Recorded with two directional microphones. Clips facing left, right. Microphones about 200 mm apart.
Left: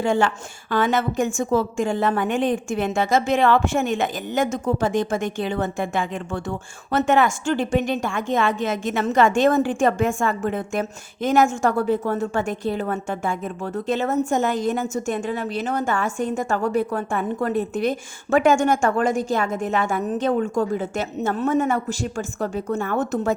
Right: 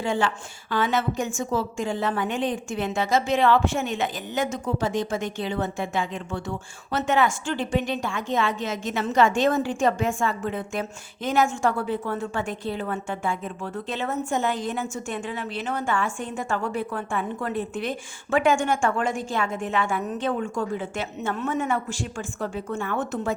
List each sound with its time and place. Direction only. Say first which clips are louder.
0.0 s a woman's voice: left 5 dB; 45° left (ahead or behind)